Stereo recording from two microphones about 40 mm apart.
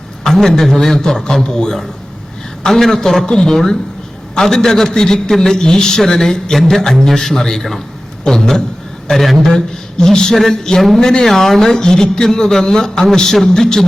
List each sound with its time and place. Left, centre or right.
0.3 s a man's voice: centre
9.0 s a man's voice: centre
9.4 s a man's voice: centre
11.3 s a man's voice: centre